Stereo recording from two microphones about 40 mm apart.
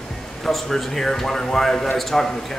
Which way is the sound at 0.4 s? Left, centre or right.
Centre.